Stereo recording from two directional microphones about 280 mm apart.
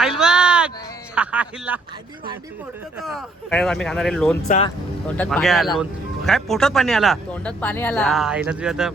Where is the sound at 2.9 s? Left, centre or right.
Centre.